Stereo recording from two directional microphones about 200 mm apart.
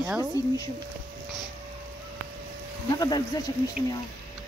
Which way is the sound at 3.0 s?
20° left (ahead or behind).